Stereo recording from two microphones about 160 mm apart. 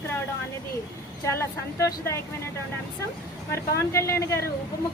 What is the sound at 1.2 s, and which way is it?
A woman's voice, 20° left (ahead or behind).